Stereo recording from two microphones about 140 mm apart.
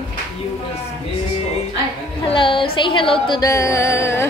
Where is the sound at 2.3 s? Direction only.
35° left (ahead or behind).